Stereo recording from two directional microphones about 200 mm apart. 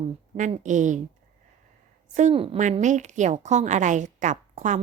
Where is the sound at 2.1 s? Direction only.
35° right (ahead or behind).